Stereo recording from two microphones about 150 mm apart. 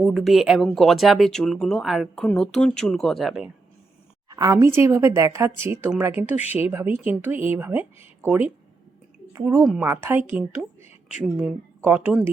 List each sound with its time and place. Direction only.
0.0 s speech: centre (ahead or behind)
4.3 s a woman's voice: 25° right (ahead or behind); by 12.2 s 5° right (ahead or behind)